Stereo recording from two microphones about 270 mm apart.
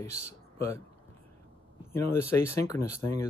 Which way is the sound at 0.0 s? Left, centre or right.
Centre.